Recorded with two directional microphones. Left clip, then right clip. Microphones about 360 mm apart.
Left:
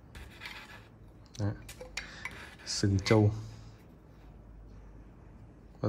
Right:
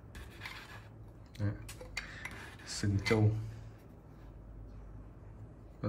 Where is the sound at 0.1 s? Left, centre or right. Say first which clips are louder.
Left 2 dB; centre.